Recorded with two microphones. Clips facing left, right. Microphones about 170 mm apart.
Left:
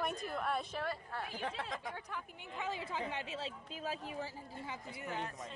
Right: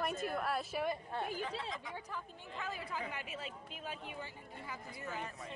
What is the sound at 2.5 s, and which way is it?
Speech, 20° left (ahead or behind).